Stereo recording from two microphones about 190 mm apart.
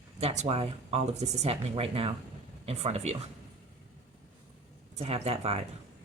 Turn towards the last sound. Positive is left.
turn(degrees=-30)  # may be behind; listen again after turning